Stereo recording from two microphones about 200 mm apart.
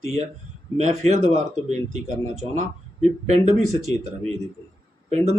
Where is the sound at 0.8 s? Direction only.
35° right (ahead or behind).